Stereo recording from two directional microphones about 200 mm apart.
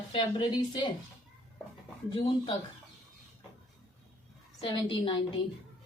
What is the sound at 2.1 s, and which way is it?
Speech, 25° left (ahead or behind).